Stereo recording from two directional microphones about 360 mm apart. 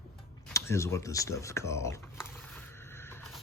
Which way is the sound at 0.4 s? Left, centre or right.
Centre.